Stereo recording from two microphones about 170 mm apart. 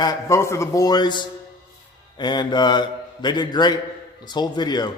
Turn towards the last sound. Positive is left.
turn(degrees=25)  # may be behind; listen again after turning